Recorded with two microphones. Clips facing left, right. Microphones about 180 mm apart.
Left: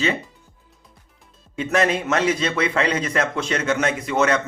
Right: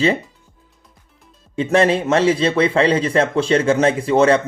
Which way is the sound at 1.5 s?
30° right (ahead or behind).